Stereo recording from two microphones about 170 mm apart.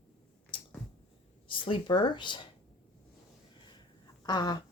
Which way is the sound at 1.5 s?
30° left (ahead or behind).